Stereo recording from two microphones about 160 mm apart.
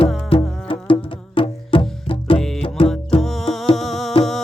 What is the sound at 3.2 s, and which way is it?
Music, centre (ahead or behind).